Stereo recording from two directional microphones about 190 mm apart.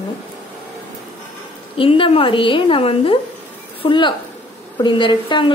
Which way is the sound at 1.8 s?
30° left (ahead or behind).